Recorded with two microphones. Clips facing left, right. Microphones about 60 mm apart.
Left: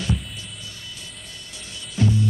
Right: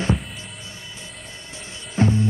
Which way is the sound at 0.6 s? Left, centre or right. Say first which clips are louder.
Right 1 dB; right.